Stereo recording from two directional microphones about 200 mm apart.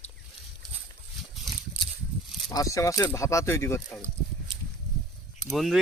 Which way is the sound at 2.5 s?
15° left (ahead or behind).